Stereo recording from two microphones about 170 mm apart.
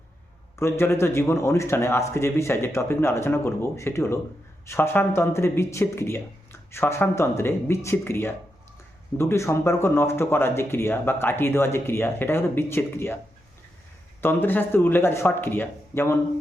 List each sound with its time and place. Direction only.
0.6 s speech: 15° left (ahead or behind)
14.2 s speech: 15° left (ahead or behind)